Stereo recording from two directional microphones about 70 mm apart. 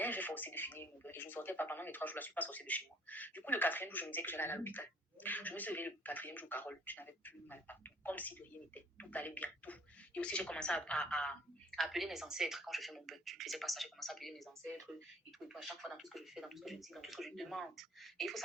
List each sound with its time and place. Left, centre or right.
0.0 s speech: left; by 18.3 s centre